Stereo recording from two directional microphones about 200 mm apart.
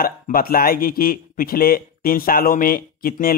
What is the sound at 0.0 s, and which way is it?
Speech, 45° left (ahead or behind).